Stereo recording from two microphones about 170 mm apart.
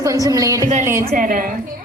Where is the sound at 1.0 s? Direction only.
60° right (ahead or behind).